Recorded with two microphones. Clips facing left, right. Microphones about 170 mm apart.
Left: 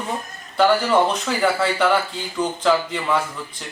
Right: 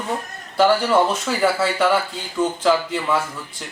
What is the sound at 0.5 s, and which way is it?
Speech, 5° right (ahead or behind).